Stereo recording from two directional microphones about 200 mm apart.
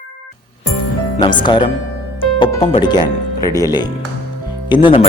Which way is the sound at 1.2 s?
25° left (ahead or behind).